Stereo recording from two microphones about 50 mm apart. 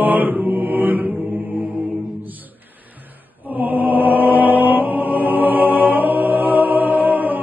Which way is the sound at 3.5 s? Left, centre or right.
Right.